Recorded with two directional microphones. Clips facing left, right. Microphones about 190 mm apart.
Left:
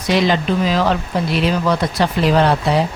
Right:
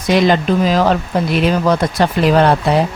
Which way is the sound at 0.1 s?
50° right (ahead or behind).